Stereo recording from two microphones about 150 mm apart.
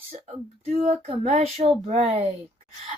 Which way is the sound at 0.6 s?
45° right (ahead or behind).